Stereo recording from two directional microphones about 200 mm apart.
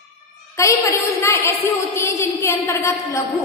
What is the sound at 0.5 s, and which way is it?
A woman's voice, 15° left (ahead or behind).